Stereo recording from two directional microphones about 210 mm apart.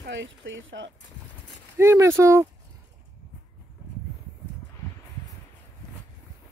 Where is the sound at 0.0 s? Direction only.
60° right (ahead or behind).